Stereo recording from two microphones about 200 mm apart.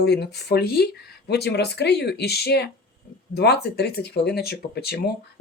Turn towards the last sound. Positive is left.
turn(degrees=55)  # may be behind; listen again after turning